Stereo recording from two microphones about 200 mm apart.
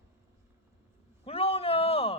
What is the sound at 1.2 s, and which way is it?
Speech, 30° left (ahead or behind).